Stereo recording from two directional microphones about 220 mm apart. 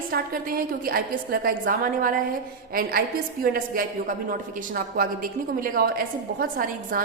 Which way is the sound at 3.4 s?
40° right (ahead or behind).